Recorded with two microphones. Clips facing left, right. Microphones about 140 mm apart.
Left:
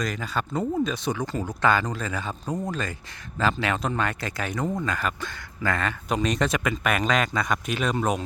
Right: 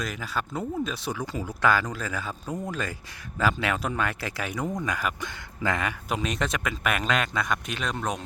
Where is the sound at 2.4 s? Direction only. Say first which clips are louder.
Left 4 dB; 15° left (ahead or behind).